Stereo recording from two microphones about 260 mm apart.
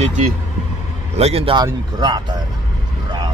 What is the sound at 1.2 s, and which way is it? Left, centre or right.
A man's voice, right.